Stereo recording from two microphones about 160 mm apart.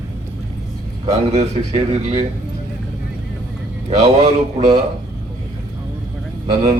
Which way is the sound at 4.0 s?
45° right (ahead or behind).